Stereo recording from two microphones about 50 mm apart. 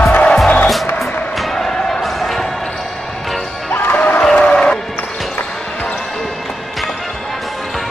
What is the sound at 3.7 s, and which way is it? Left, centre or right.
Music, left.